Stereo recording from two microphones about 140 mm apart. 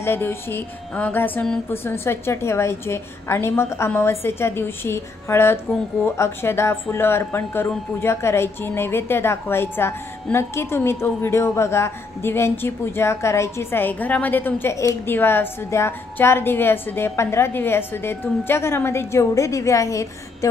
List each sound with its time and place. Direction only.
0.0 s a woman's voice: 15° left (ahead or behind)